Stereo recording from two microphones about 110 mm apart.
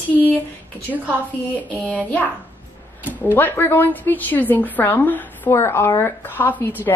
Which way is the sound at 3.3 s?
20° left (ahead or behind).